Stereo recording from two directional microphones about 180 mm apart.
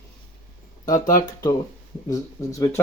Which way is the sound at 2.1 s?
15° left (ahead or behind).